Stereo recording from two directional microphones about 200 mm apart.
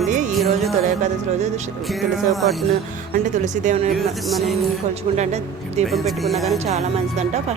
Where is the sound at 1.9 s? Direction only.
Centre (ahead or behind).